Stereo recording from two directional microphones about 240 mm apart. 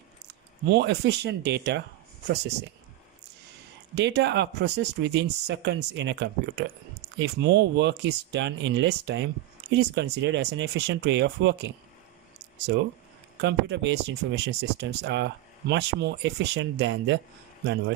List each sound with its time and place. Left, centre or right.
0.3 s speech: right
3.9 s speech: right
13.4 s speech: right